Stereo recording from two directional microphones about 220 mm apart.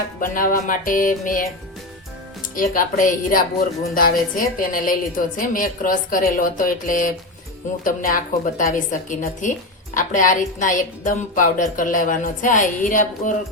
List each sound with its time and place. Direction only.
0.2 s a woman's voice: 40° left (ahead or behind)
2.6 s a woman's voice: 40° left (ahead or behind)